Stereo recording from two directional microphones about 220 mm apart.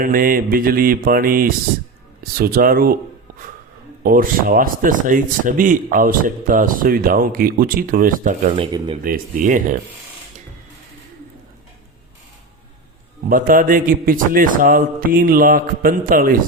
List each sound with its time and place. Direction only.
0.0 s speech: 40° right (ahead or behind)
8.4 s speech: 25° right (ahead or behind)
9.0 s speech: 40° right (ahead or behind)
13.2 s speech: 40° right (ahead or behind)